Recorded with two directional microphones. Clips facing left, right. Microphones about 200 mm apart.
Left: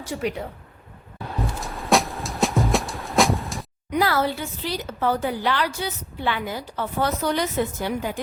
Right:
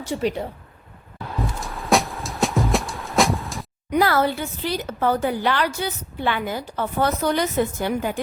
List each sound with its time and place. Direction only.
0.0 s speech: 30° right (ahead or behind)
1.6 s music: centre (ahead or behind)
3.9 s a woman's voice: 50° right (ahead or behind)